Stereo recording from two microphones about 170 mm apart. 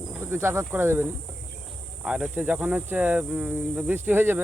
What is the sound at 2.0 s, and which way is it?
Speech, 5° right (ahead or behind).